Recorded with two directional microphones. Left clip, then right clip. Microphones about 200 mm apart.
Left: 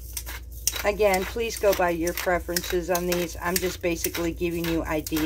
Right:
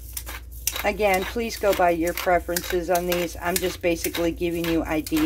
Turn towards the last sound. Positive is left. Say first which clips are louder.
# right 3 dB
turn(degrees=-15)  # may be behind; listen again after turning